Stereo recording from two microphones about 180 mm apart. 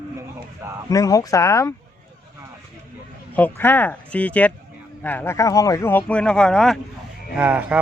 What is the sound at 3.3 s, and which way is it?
Speech, 10° left (ahead or behind).